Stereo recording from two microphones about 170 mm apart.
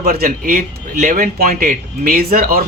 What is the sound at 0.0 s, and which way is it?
Speech, 60° right (ahead or behind).